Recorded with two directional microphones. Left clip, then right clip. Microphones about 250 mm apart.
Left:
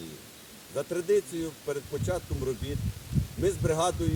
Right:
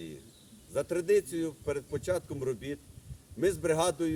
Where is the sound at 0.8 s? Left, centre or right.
Centre.